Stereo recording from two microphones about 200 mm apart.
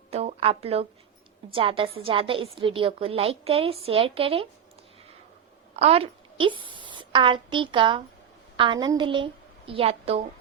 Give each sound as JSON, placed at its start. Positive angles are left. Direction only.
{"t": 0.1, "sound": "a woman's voice", "side_deg": -30}
{"t": 5.7, "sound": "a woman's voice", "side_deg": -30}